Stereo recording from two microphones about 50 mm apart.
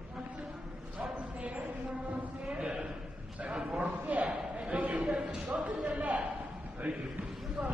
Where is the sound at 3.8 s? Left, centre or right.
Right.